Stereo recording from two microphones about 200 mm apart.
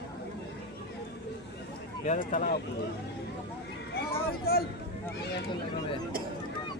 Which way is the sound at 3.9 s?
50° left (ahead or behind).